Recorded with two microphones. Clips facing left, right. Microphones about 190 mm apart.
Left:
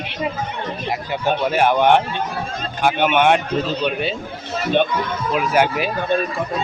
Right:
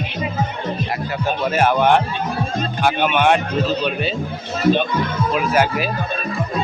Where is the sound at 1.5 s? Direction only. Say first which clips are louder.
Right 1 dB; 15° left (ahead or behind).